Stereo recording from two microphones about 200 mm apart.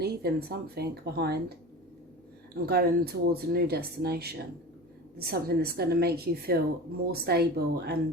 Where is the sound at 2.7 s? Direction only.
50° right (ahead or behind).